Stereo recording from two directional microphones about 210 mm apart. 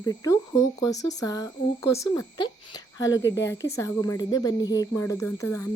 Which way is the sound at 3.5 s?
15° left (ahead or behind).